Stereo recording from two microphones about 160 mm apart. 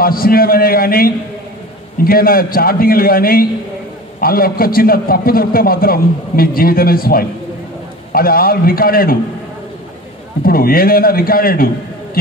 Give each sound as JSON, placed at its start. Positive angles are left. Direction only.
{"t": 0.0, "sound": "a man's voice", "side_deg": 65}
{"t": 10.4, "sound": "a man's voice", "side_deg": 65}